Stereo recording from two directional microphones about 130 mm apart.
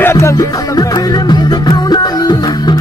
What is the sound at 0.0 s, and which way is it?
Music, 20° left (ahead or behind).